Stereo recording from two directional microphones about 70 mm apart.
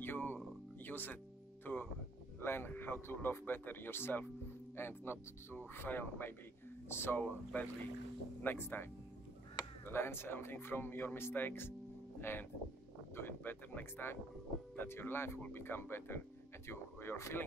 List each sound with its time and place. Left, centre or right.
0.0 s a sound: left
0.8 s speech: left
1.6 s music: left
2.4 s speech: left
9.8 s speech: left